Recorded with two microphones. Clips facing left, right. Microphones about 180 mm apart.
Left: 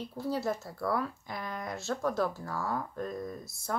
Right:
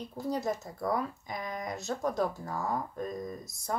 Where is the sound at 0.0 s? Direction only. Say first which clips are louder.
Even; 15° right (ahead or behind).